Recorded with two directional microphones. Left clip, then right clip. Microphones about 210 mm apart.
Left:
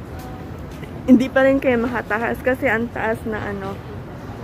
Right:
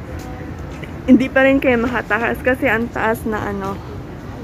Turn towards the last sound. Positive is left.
turn(degrees=-20)  # may be behind; listen again after turning